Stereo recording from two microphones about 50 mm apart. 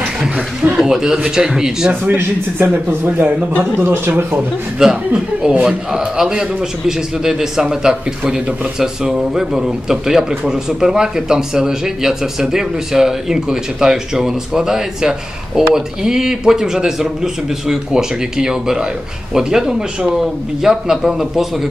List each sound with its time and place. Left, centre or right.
0.7 s speech: centre
2.0 s a man's voice: right
3.2 s a man's voice: right
3.8 s a man's voice: right
4.7 s speech: centre